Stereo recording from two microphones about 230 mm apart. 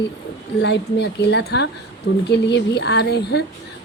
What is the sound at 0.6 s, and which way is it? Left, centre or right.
A woman's voice, left.